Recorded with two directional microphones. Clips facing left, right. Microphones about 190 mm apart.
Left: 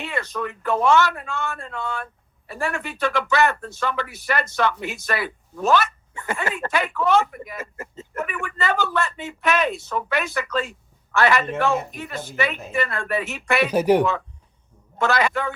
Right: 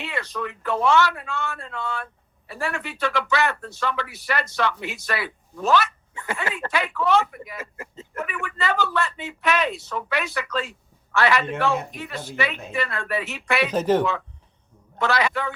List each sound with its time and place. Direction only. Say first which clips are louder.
0.0 s speech: left 2 dB; 45° left (ahead or behind)
13.7 s speech: left 3 dB; 10° left (ahead or behind)
14.9 s speech: left 2 dB; 45° left (ahead or behind)